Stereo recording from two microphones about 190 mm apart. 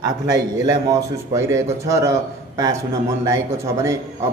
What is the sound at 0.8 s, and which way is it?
A man's voice, 15° right (ahead or behind).